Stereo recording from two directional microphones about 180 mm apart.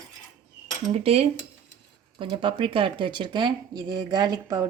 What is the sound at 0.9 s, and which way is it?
Speech, 35° right (ahead or behind).